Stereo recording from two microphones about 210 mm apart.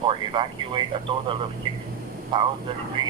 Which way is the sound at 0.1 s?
25° right (ahead or behind).